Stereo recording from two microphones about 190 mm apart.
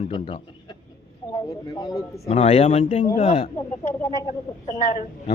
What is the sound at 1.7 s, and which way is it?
Speech, 20° left (ahead or behind).